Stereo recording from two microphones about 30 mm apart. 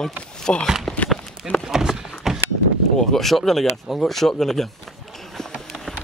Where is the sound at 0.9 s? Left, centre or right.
Centre.